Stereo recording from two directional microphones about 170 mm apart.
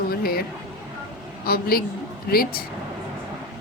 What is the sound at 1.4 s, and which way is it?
A woman's voice, 60° left (ahead or behind).